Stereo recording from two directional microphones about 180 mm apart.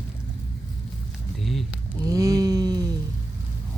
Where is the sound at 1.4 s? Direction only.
Centre (ahead or behind).